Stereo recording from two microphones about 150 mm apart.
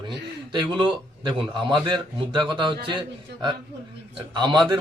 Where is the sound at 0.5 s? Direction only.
30° right (ahead or behind).